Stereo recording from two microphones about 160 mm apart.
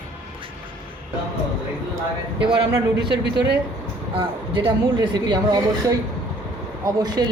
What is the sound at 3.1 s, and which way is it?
Speech, 90° right.